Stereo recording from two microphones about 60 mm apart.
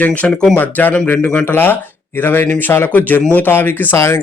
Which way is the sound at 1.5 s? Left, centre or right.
Left.